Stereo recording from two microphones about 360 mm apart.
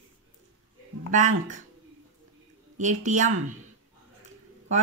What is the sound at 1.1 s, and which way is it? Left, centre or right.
Speech, right.